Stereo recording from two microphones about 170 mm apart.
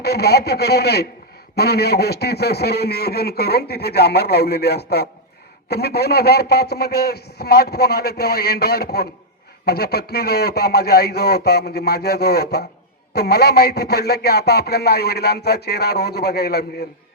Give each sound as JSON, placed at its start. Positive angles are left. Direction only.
{"t": 0.0, "sound": "speech", "side_deg": 70}